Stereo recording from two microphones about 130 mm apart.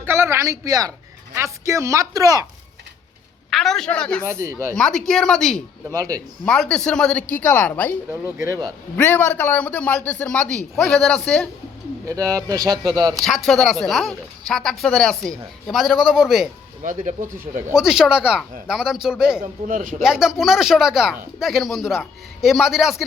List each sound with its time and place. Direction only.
0.0 s speech: 20° right (ahead or behind)
3.5 s a woman's voice: centre (ahead or behind)
4.3 s speech: 25° right (ahead or behind)
4.8 s speech: 5° left (ahead or behind)
5.9 s speech: 25° right (ahead or behind)
6.4 s speech: 5° left (ahead or behind)
8.1 s speech: 25° right (ahead or behind)
9.0 s speech: 15° left (ahead or behind)
12.0 s speech: 25° right (ahead or behind)
13.1 s speech: centre (ahead or behind)
16.8 s speech: 75° right (ahead or behind); by 17.6 s 90° right
17.7 s speech: 5° right (ahead or behind)
19.4 s speech: 90° right
20.0 s speech: 5° right (ahead or behind)